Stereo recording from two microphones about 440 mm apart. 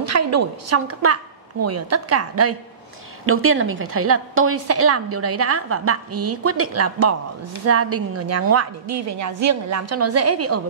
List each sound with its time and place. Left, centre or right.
0.0 s a woman's voice: right